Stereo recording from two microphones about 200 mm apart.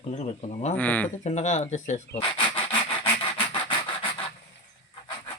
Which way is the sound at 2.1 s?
25° left (ahead or behind).